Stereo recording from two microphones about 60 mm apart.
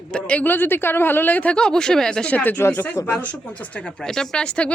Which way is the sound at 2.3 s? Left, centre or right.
Left.